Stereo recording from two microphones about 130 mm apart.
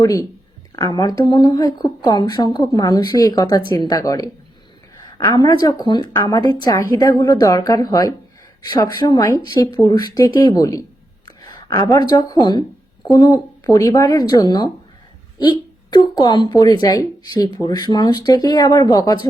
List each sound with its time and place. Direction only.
0.0 s speech: 25° left (ahead or behind)
15.9 s speech: 35° left (ahead or behind)